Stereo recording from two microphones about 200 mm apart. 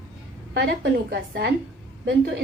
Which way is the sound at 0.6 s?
60° right (ahead or behind).